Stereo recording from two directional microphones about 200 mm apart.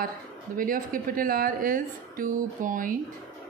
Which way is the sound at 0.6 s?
45° right (ahead or behind).